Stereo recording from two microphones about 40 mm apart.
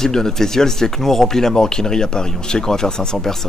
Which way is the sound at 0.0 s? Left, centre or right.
Centre.